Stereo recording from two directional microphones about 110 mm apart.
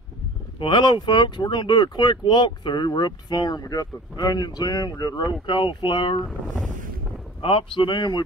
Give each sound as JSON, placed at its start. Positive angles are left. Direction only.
{"t": 0.6, "sound": "speech", "side_deg": 45}
{"t": 7.4, "sound": "a man's voice", "side_deg": 50}